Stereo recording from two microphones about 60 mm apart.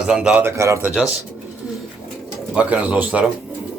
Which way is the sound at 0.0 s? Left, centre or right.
Centre.